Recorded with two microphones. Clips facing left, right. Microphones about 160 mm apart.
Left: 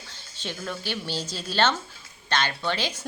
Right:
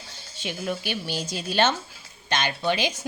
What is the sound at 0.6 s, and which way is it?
Speech, 15° right (ahead or behind).